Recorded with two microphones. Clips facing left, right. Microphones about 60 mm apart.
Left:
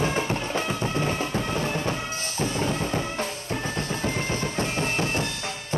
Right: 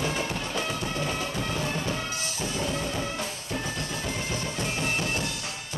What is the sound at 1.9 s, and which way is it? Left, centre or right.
Music, left.